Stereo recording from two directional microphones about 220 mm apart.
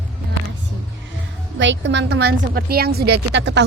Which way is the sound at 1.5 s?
55° right (ahead or behind).